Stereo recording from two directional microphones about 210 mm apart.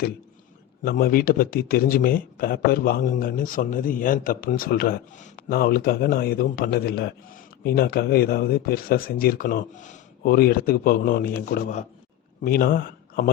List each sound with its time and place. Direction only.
0.9 s speech: 45° left (ahead or behind)